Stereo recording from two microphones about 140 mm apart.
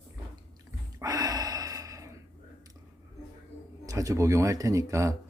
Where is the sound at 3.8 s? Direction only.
25° right (ahead or behind).